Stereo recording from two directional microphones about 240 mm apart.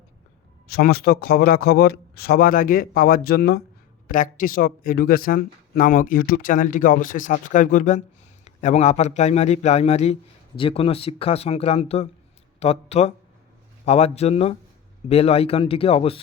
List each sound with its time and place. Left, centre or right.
0.7 s a man's voice: left